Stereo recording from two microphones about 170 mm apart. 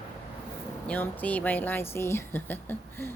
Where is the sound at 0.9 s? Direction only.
10° left (ahead or behind).